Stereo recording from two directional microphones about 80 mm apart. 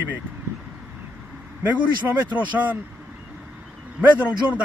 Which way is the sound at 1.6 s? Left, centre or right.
Right.